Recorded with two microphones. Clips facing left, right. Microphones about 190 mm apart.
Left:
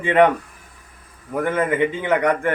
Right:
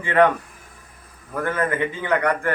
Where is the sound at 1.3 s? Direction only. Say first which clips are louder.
Left 3 dB; 20° left (ahead or behind).